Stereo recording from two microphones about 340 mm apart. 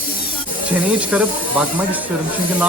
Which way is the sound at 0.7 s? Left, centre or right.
Centre.